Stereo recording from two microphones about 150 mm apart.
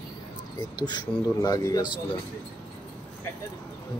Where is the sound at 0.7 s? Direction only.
30° left (ahead or behind).